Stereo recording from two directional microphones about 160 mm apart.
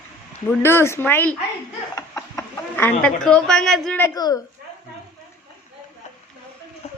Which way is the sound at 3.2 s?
5° left (ahead or behind).